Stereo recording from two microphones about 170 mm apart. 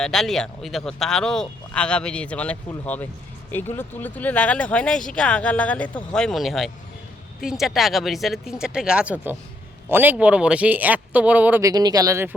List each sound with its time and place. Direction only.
0.0 s speech: centre (ahead or behind)
11.7 s speech: 25° right (ahead or behind)